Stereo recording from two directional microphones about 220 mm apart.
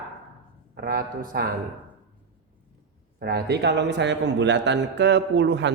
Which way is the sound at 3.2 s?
45° right (ahead or behind).